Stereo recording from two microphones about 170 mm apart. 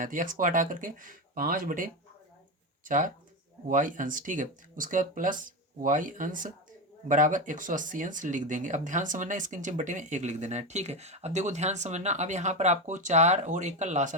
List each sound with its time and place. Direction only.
0.0 s speech: 50° right (ahead or behind)